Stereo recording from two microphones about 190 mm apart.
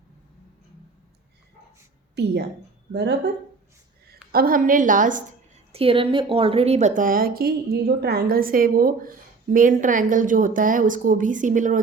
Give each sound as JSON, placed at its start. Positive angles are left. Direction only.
{"t": 2.1, "sound": "a woman's voice", "side_deg": -60}
{"t": 4.3, "sound": "a woman's voice", "side_deg": -50}
{"t": 5.7, "sound": "a woman's voice", "side_deg": -30}